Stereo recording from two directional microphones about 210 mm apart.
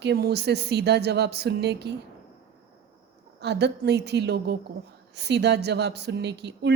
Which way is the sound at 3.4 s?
55° right (ahead or behind).